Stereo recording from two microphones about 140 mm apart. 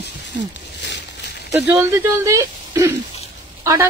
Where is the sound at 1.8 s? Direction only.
20° right (ahead or behind).